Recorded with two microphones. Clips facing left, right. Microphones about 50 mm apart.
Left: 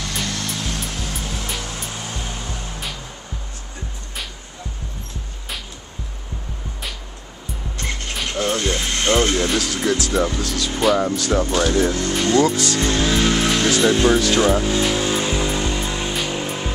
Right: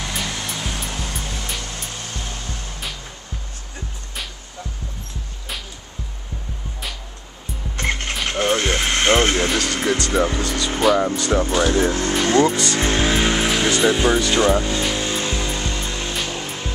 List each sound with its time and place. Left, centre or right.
0.1 s music: centre
7.7 s music: right
8.3 s a sound: right
9.5 s speech: centre
11.7 s speech: right
12.4 s speech: centre
12.7 s speech: right
13.3 s music: centre